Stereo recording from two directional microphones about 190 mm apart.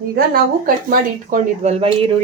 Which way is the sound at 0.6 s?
45° right (ahead or behind).